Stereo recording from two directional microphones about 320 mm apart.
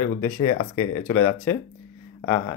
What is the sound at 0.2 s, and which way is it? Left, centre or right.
Speech, centre.